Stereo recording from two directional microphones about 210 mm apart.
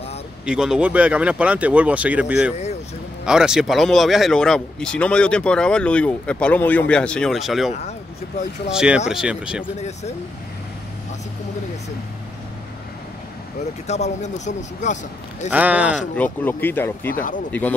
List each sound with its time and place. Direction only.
0.5 s speech: 5° right (ahead or behind)
8.7 s speech: 5° right (ahead or behind)
9.8 s speech: 30° left (ahead or behind)
13.8 s speech: 30° left (ahead or behind)
15.5 s speech: 5° right (ahead or behind)
16.2 s speech: 10° left (ahead or behind)
17.1 s speech: 40° left (ahead or behind)
17.5 s speech: 10° left (ahead or behind)